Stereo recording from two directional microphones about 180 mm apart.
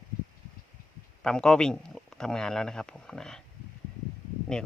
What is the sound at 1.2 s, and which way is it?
Speech, 5° left (ahead or behind).